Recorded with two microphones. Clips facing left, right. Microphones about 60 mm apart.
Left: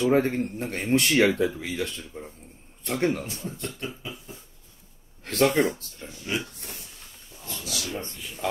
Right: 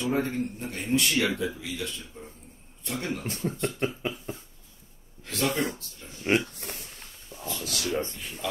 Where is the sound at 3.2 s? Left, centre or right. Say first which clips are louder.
Right 5 dB; right.